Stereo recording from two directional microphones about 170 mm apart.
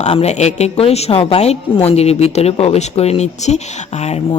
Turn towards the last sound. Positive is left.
turn(degrees=40)  # may be behind; listen again after turning